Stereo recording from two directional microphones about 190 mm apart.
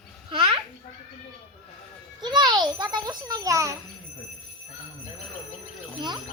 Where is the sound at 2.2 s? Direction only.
20° right (ahead or behind).